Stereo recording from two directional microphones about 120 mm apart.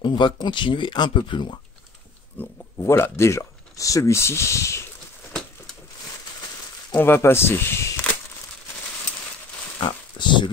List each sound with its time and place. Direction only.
0.0 s speech: 40° left (ahead or behind)
2.3 s speech: 20° left (ahead or behind)
6.9 s speech: 15° left (ahead or behind)
9.8 s pig: 40° left (ahead or behind)